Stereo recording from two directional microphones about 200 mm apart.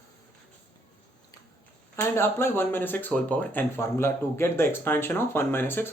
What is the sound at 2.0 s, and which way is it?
Speech, 10° left (ahead or behind).